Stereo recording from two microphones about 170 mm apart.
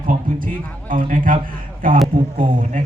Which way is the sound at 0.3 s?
50° right (ahead or behind).